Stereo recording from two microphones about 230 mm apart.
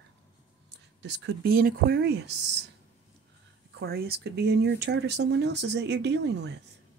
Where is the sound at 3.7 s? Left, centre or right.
Right.